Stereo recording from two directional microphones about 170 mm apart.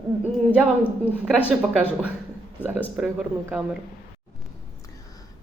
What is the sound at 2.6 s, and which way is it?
A woman's voice, 10° right (ahead or behind).